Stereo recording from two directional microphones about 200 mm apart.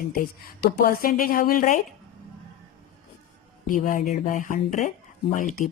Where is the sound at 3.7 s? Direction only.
40° left (ahead or behind).